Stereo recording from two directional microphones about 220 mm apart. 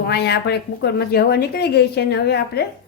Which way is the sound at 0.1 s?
45° left (ahead or behind).